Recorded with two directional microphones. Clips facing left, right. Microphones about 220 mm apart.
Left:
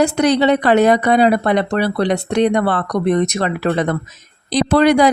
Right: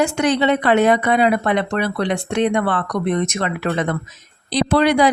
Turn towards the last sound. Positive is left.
turn(degrees=45)  # may be behind; listen again after turning